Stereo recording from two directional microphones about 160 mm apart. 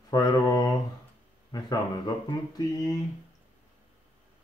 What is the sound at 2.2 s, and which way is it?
Speech, 25° left (ahead or behind).